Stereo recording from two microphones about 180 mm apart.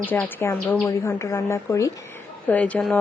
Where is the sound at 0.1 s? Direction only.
10° left (ahead or behind).